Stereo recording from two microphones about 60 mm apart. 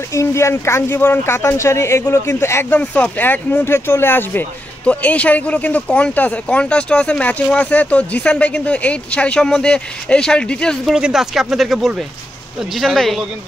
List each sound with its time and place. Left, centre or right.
0.1 s speech: left
2.7 s speech: left
4.8 s speech: left
10.9 s speech: centre